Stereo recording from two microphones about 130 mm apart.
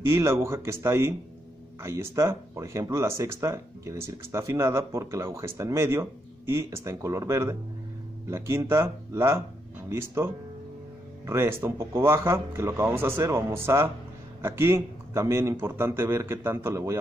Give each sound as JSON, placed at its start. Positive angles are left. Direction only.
{"t": 0.0, "sound": "speech", "side_deg": -20}